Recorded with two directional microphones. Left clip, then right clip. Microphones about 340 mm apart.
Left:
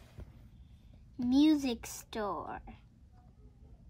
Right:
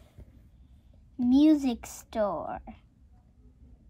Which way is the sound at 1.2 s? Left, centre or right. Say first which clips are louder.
Right 5 dB; centre.